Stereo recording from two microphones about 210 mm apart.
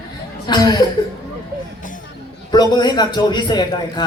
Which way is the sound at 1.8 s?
40° left (ahead or behind).